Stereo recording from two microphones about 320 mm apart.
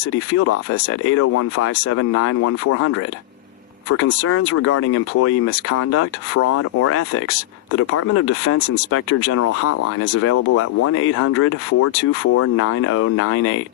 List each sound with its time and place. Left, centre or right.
0.3 s speech: left
3.9 s speech: left